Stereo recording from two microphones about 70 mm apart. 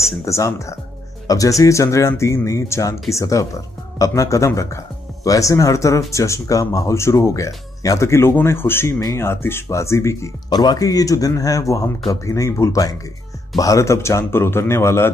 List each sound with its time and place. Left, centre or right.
0.2 s speech: left
10.5 s speech: left